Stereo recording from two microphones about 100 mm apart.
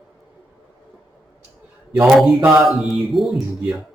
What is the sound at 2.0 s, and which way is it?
Music, 5° right (ahead or behind).